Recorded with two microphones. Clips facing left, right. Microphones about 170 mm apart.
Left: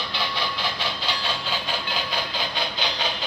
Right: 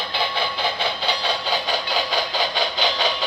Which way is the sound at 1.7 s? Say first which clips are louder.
Right 5 dB; 80° right.